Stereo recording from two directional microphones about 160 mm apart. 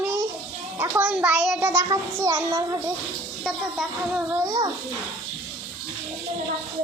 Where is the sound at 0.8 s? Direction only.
10° right (ahead or behind).